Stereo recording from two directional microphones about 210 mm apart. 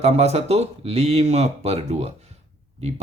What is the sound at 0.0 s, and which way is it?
Speech, 30° right (ahead or behind).